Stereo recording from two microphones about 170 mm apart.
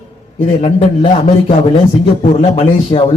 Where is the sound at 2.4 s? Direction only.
35° left (ahead or behind).